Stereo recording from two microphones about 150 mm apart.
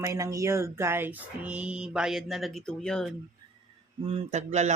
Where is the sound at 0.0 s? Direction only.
20° right (ahead or behind); by 3.2 s 5° left (ahead or behind).